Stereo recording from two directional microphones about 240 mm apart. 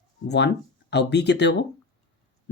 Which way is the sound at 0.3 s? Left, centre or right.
Left.